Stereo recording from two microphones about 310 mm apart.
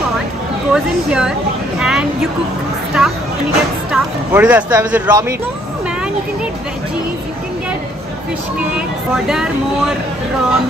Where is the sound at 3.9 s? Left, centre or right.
Centre.